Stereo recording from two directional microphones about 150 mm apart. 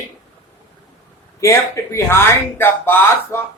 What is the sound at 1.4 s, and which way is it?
Speech, 20° left (ahead or behind).